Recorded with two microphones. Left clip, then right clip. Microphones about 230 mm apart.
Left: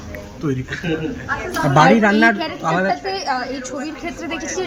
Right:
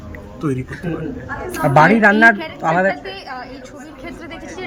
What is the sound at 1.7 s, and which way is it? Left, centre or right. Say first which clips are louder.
A man's voice: right 2 dB; centre.